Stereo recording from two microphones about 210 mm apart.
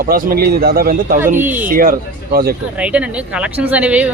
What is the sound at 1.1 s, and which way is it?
Speech, 10° right (ahead or behind).